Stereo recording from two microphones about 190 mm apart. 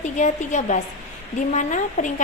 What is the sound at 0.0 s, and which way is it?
Speech, 40° left (ahead or behind).